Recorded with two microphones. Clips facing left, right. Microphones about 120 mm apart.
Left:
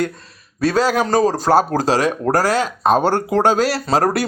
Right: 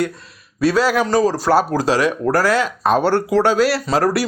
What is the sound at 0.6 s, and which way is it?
Speech, 40° left (ahead or behind).